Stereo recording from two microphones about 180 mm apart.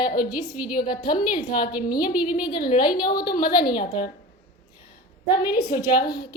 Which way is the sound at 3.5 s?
25° left (ahead or behind).